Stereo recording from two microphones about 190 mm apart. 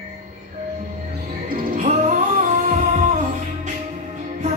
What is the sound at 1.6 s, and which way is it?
Music, 40° right (ahead or behind).